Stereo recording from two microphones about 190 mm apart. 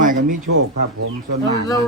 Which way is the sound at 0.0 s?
45° right (ahead or behind).